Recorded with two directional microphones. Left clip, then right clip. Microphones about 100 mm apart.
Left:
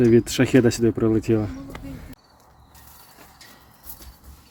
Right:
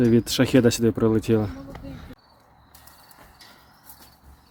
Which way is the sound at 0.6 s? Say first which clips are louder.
Even; 30° right (ahead or behind).